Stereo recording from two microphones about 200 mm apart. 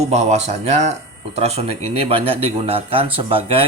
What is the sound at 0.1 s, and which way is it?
Speech, 35° right (ahead or behind).